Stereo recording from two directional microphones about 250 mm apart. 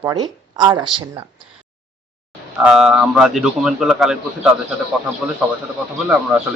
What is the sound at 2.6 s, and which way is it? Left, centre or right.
A man's voice, centre.